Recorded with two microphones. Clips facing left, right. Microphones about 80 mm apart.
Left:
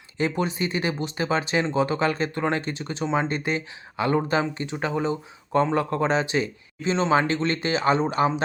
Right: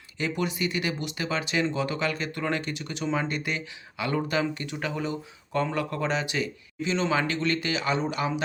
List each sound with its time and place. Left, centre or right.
0.2 s speech: left